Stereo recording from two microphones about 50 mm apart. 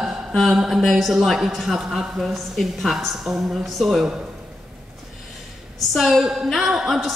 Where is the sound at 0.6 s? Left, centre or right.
Centre.